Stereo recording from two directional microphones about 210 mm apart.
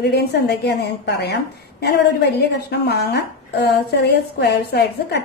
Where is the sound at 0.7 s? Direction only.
50° left (ahead or behind).